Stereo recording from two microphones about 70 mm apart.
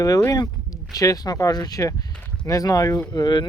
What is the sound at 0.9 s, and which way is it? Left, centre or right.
Speech, left.